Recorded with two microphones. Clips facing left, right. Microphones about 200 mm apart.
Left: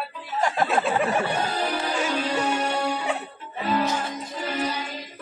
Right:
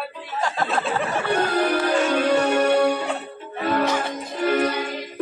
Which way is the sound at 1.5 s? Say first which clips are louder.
Right 7 dB; 60° right (ahead or behind).